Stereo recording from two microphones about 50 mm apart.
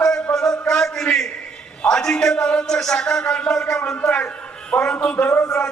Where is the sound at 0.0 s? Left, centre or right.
Centre.